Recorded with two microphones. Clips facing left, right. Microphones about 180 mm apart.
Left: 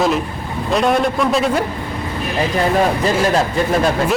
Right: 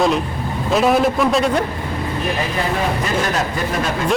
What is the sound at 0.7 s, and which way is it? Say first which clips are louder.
Speech: right 1 dB; centre (ahead or behind).